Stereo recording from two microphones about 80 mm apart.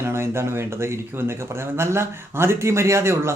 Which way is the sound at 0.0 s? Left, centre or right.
Right.